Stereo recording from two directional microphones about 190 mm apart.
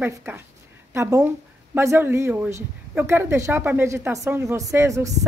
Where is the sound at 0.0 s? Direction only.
10° right (ahead or behind).